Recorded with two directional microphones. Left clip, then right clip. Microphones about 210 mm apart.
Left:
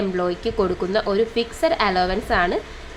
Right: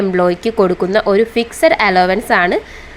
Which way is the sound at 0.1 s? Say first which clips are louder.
Right 9 dB; 25° right (ahead or behind).